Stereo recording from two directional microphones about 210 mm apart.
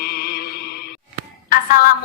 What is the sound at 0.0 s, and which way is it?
Music, 45° left (ahead or behind).